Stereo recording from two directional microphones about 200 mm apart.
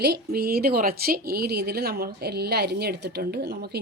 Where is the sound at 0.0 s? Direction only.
55° right (ahead or behind).